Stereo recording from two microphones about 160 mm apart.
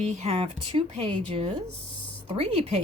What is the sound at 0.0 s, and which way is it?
A woman's voice, 45° right (ahead or behind).